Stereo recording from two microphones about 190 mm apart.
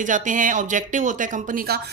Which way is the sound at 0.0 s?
45° right (ahead or behind).